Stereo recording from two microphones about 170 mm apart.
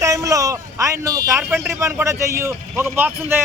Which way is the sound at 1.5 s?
5° right (ahead or behind).